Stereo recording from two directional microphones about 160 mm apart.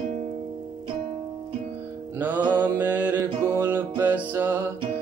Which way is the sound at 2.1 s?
10° right (ahead or behind).